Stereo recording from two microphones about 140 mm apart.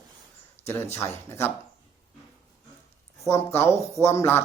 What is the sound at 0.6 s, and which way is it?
Speech, 20° left (ahead or behind).